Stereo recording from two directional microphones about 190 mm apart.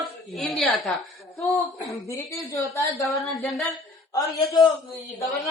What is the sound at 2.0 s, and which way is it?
Speech, 15° left (ahead or behind).